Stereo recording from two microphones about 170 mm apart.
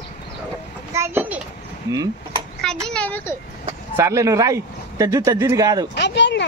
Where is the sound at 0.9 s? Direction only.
15° right (ahead or behind).